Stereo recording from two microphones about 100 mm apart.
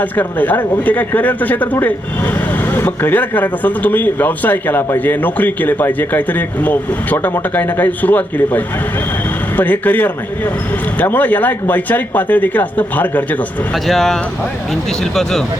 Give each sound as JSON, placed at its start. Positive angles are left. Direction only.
{"t": 0.0, "sound": "a man's voice", "side_deg": 15}
{"t": 13.8, "sound": "speech", "side_deg": 5}